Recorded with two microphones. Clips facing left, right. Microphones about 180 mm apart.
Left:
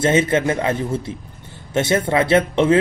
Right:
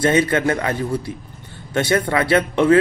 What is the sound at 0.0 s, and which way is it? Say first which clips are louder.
A man's voice: even; 25° left (ahead or behind).